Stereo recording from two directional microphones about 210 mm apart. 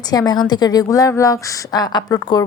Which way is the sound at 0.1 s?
20° left (ahead or behind).